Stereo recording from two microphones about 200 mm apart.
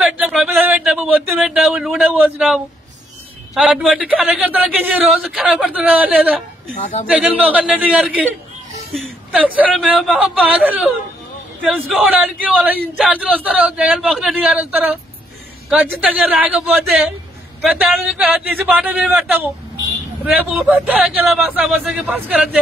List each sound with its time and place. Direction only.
0.0 s a sound: centre (ahead or behind)
4.1 s a man's voice: 5° right (ahead or behind)
6.8 s speech: 35° left (ahead or behind)
7.1 s speech: 5° right (ahead or behind)
8.9 s a sound: centre (ahead or behind)
9.6 s a man's voice: 5° right (ahead or behind)
11.9 s a man's voice: 5° right (ahead or behind)